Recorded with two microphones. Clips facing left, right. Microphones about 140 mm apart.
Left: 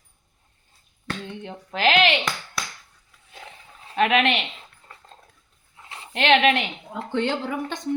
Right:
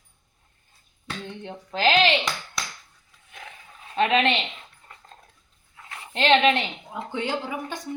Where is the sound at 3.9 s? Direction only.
30° right (ahead or behind).